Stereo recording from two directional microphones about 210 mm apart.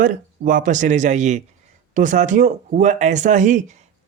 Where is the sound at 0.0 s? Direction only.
40° right (ahead or behind).